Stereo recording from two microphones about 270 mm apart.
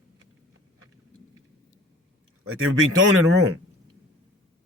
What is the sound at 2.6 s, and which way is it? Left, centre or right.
Speech, right.